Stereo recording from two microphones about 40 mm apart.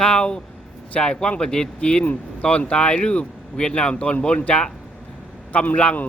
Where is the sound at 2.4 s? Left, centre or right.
Left.